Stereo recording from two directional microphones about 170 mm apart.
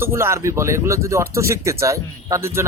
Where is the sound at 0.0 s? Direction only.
15° right (ahead or behind).